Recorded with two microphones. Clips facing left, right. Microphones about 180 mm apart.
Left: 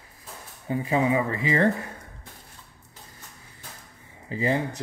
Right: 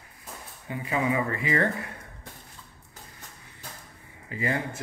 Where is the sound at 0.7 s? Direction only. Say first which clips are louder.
Left 4 dB; 30° left (ahead or behind).